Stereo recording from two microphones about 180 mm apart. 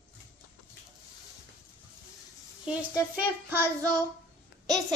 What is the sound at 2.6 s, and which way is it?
Speech, 10° right (ahead or behind).